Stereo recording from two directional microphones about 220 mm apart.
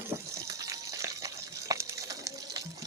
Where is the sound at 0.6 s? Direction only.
15° right (ahead or behind).